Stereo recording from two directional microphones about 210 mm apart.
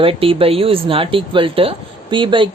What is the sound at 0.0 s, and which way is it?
Speech, 25° right (ahead or behind).